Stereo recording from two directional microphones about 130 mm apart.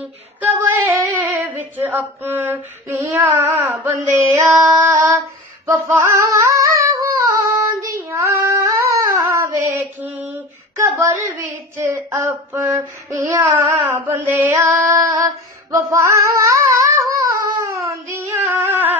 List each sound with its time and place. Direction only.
0.4 s female singing: 15° right (ahead or behind)
5.7 s a sound: 20° right (ahead or behind)
7.8 s child singing: 25° right (ahead or behind)
9.8 s mantra: 15° right (ahead or behind)
10.8 s speech: 25° right (ahead or behind)
11.2 s female singing: 15° right (ahead or behind)